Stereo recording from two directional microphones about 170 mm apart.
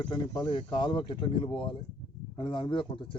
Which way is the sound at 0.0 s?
25° left (ahead or behind).